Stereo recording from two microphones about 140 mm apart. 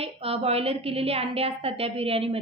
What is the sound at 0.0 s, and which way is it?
A woman's voice, 45° right (ahead or behind).